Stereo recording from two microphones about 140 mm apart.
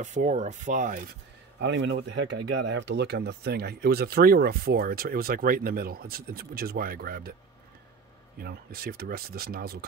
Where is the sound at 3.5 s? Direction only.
90° right.